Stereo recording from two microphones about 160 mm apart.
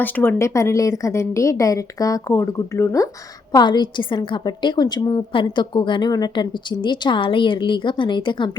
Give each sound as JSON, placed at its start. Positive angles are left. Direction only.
{"t": 0.0, "sound": "a woman's voice", "side_deg": 10}